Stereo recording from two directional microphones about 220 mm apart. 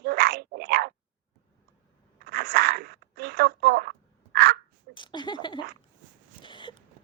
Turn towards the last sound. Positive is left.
turn(degrees=20)  # may be behind; listen again after turning